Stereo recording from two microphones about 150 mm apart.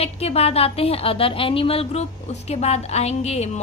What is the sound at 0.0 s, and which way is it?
A woman's voice, 45° left (ahead or behind).